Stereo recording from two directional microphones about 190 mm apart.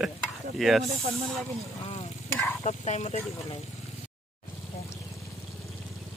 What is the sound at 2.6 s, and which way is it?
Speech, 35° left (ahead or behind).